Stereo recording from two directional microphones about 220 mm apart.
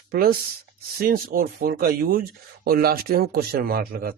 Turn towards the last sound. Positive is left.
turn(degrees=-45)  # may be behind; listen again after turning